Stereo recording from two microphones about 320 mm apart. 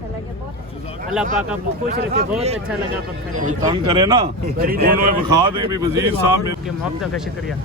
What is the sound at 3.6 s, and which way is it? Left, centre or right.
Speech, centre.